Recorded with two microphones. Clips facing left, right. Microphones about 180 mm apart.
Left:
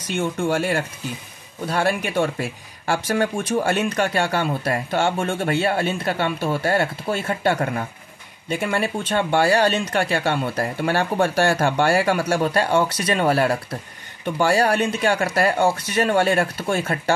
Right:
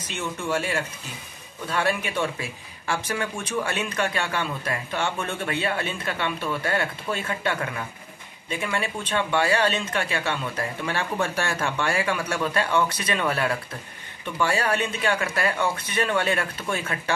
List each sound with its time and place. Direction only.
0.1 s a man's voice: 50° left (ahead or behind)